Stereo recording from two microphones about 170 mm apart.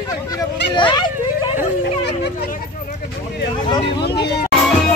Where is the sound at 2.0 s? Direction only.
90° left.